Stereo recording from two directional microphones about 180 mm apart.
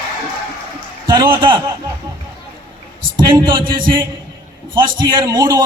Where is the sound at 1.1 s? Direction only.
25° right (ahead or behind).